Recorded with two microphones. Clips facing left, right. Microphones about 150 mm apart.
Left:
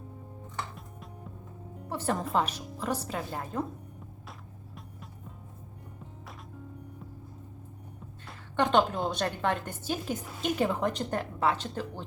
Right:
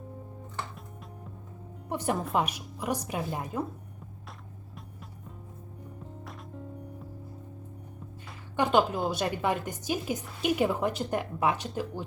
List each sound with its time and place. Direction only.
0.8 s music: centre (ahead or behind)
1.9 s music: 15° right (ahead or behind)
2.3 s a woman's voice: 10° right (ahead or behind)
4.3 s music: centre (ahead or behind)
8.3 s a woman's voice: 5° right (ahead or behind)